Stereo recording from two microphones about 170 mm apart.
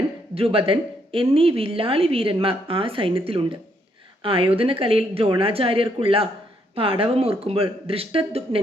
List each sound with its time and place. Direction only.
0.3 s a woman's voice: 35° right (ahead or behind)